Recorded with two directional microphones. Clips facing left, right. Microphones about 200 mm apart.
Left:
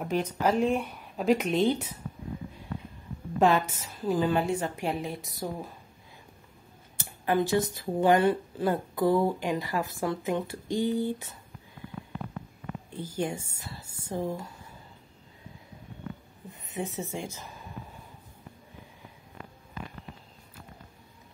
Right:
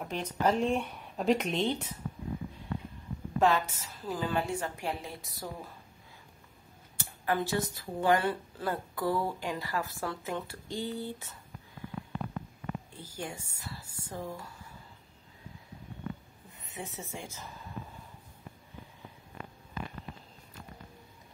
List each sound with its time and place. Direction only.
0.0 s speech: 5° left (ahead or behind)
3.3 s a woman's voice: 15° left (ahead or behind)
7.0 s speech: 20° left (ahead or behind)
13.0 s speech: 20° left (ahead or behind)
16.7 s a woman's voice: 20° left (ahead or behind)